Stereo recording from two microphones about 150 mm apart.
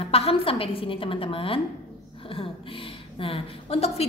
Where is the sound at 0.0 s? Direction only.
40° left (ahead or behind).